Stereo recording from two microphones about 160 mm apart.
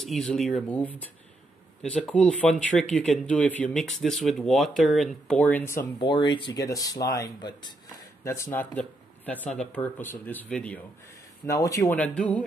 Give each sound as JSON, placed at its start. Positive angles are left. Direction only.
{"t": 0.0, "sound": "speech", "side_deg": 0}
{"t": 5.4, "sound": "speech", "side_deg": 10}
{"t": 5.9, "sound": "speech", "side_deg": 30}
{"t": 11.4, "sound": "speech", "side_deg": 20}
{"t": 12.0, "sound": "speech", "side_deg": 10}